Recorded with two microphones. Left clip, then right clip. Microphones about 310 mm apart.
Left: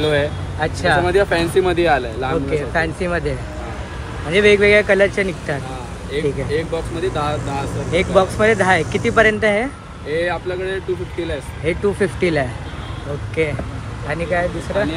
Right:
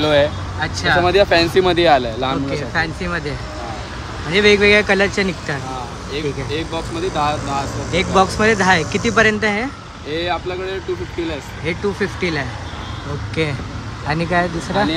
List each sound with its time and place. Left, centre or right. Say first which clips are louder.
0.0 s speech: right 3 dB; right
0.6 s speech: even; centre
1.0 s speech: right 3 dB; right
2.7 s speech: even; centre
6.1 s speech: left 3 dB; centre
7.9 s speech: even; centre
10.1 s speech: left 1 dB; centre
11.6 s speech: left 3 dB; centre